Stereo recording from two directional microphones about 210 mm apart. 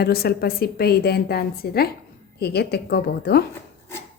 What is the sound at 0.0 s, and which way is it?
A woman's voice, 50° left (ahead or behind).